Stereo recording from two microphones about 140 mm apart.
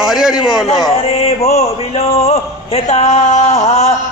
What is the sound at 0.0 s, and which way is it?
Speech, centre (ahead or behind).